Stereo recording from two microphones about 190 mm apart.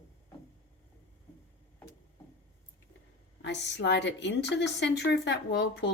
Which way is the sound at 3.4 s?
65° left (ahead or behind).